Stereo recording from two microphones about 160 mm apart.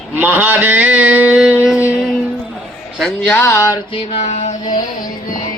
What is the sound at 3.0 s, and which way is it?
Speech, 5° left (ahead or behind).